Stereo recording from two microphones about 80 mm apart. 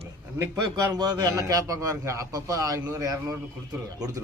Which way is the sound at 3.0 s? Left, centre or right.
Right.